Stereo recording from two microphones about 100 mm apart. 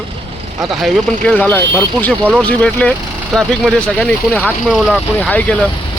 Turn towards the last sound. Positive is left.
turn(degrees=15)  # may be behind; listen again after turning